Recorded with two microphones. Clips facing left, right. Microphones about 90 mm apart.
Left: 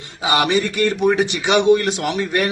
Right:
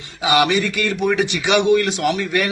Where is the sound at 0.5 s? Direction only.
35° left (ahead or behind).